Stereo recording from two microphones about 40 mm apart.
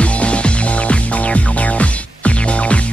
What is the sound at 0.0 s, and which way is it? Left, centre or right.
Music, left.